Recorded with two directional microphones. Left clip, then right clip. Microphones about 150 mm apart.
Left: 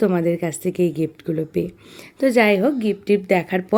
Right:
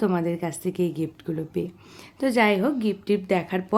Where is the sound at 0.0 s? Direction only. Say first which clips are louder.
Left 6 dB; 25° left (ahead or behind).